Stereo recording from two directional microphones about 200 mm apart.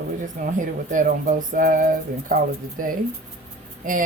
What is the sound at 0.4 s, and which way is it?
Speech, 40° right (ahead or behind).